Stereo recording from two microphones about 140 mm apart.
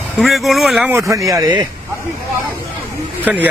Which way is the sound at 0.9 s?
20° right (ahead or behind).